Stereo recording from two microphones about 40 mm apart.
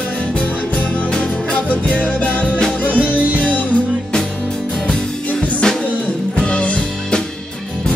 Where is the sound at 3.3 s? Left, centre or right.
Left.